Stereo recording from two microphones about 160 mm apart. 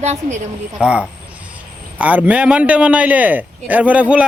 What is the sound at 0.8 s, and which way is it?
A man's voice, 5° right (ahead or behind).